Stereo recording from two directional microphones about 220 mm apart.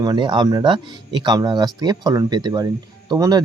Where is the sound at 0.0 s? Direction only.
20° right (ahead or behind).